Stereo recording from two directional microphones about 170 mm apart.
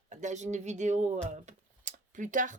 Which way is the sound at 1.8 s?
50° right (ahead or behind).